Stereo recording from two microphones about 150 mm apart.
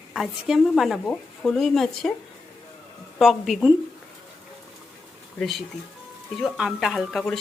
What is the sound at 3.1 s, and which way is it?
Speech, centre (ahead or behind).